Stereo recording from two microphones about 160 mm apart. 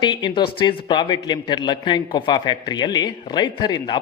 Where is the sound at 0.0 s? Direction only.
30° left (ahead or behind).